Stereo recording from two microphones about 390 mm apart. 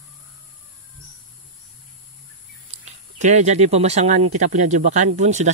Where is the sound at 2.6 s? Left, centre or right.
Centre.